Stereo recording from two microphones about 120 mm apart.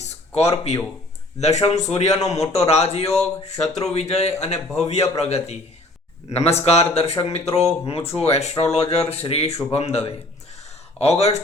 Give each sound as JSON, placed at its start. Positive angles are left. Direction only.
{"t": 0.5, "sound": "speech", "side_deg": 60}